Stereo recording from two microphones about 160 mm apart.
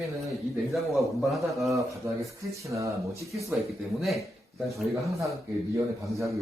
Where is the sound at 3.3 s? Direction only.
20° right (ahead or behind).